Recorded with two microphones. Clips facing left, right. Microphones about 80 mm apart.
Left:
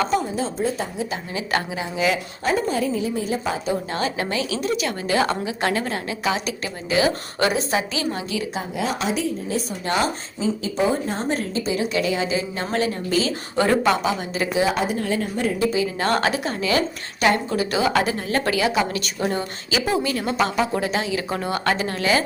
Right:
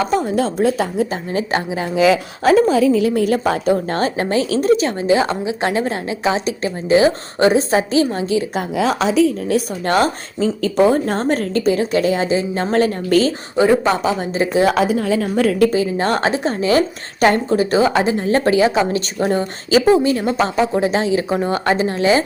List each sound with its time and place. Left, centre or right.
0.3 s a woman's voice: right
1.1 s a woman's voice: right
2.0 s a woman's voice: right
5.0 s a woman's voice: right
9.5 s a woman's voice: right
10.6 s a woman's voice: right
11.8 s a woman's voice: right
13.6 s speech: centre
13.9 s a woman's voice: right
14.6 s a woman's voice: right
15.4 s a woman's voice: right
15.7 s a woman's voice: right